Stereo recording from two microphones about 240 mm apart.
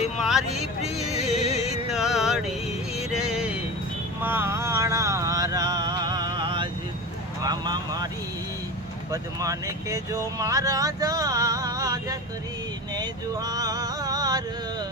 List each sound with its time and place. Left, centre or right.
0.2 s speech: centre
1.3 s music: left
1.9 s a sound: centre
3.0 s music: centre
4.2 s a sound: centre
7.4 s vehicle: centre
9.1 s speech: centre
12.9 s male singing: centre